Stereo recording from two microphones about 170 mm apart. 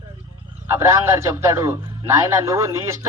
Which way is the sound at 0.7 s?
15° right (ahead or behind).